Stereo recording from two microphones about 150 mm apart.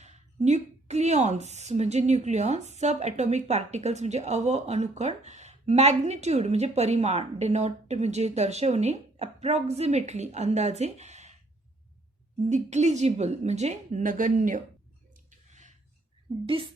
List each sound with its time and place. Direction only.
0.0 s a woman's voice: 50° right (ahead or behind)
12.5 s a woman's voice: 50° right (ahead or behind)
15.3 s a sound: 55° right (ahead or behind)
16.3 s speech: 35° right (ahead or behind)